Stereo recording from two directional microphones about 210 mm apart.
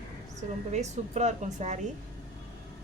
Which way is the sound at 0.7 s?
35° right (ahead or behind).